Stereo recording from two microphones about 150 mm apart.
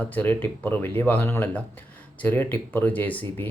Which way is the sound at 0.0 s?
10° left (ahead or behind).